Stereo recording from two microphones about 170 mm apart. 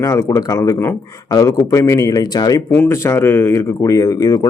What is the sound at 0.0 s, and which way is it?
A man's voice, 20° left (ahead or behind).